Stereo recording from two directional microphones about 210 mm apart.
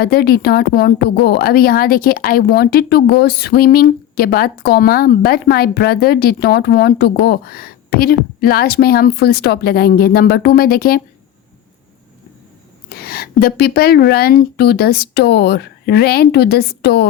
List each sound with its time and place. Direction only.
0.0 s speech: 45° left (ahead or behind)
12.9 s speech: 45° left (ahead or behind)